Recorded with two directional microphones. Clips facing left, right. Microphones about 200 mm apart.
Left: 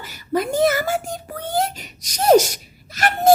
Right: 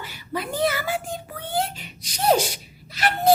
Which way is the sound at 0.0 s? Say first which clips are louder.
Left 8 dB; 45° left (ahead or behind).